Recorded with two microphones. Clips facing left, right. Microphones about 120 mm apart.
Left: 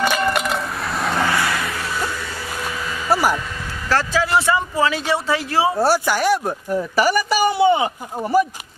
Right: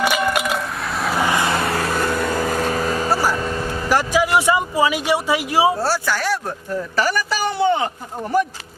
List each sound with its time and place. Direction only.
0.0 s keys jangling: 5° right (ahead or behind)
1.2 s vehicle: 20° right (ahead or behind)
1.6 s vehicle: 50° right (ahead or behind)
3.1 s vehicle: 15° left (ahead or behind)
3.8 s speech: 15° right (ahead or behind)
5.8 s speech: 15° left (ahead or behind)